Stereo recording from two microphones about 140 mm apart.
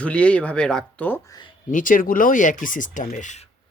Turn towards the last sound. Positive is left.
turn(degrees=65)  # may be behind; listen again after turning